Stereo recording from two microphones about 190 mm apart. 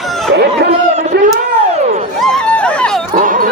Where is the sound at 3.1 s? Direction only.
45° right (ahead or behind).